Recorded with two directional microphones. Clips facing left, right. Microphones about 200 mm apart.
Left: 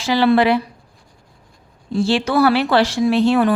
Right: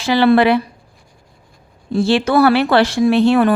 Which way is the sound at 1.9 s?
60° right (ahead or behind).